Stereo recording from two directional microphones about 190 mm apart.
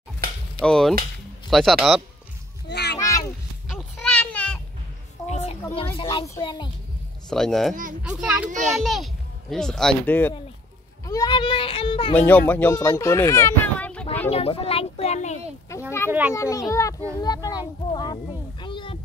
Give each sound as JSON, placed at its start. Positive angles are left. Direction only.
{"t": 0.6, "sound": "speech", "side_deg": 5}
{"t": 2.7, "sound": "a sound", "side_deg": 60}
{"t": 3.0, "sound": "a sound", "side_deg": 15}
{"t": 3.6, "sound": "children playing", "side_deg": 0}
{"t": 5.2, "sound": "a sound", "side_deg": 35}
{"t": 5.9, "sound": "a child's voice", "side_deg": 30}
{"t": 7.2, "sound": "speech", "side_deg": 5}
{"t": 11.1, "sound": "a child's voice", "side_deg": 20}
{"t": 12.2, "sound": "speech", "side_deg": 10}
{"t": 14.3, "sound": "a child's voice", "side_deg": 30}
{"t": 15.7, "sound": "children playing", "side_deg": 15}
{"t": 16.1, "sound": "a child's voice", "side_deg": -10}
{"t": 16.3, "sound": "a child's voice", "side_deg": 15}